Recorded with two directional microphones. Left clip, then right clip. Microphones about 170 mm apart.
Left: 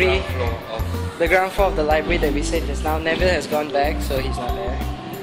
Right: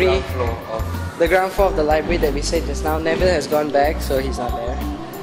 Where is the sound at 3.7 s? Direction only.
35° right (ahead or behind).